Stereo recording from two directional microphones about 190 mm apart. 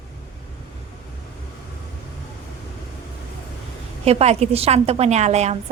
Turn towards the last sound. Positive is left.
turn(degrees=-35)  # may be behind; listen again after turning